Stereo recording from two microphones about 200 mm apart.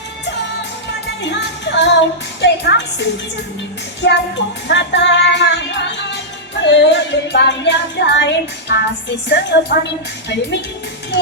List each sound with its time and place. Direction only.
1.2 s music: 60° left (ahead or behind)